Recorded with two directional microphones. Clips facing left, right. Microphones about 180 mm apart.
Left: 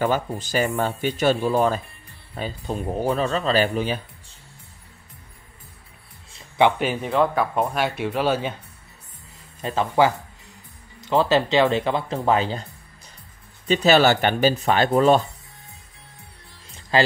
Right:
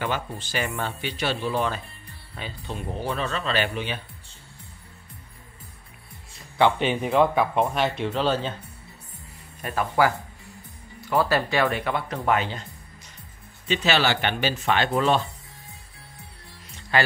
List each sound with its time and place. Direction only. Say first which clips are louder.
0.0 s speech: left 6 dB; 40° left (ahead or behind)
6.6 s speech: left 1 dB; 5° left (ahead or behind)
9.6 s speech: left 3 dB; 25° left (ahead or behind)
13.7 s speech: left 6 dB; 40° left (ahead or behind)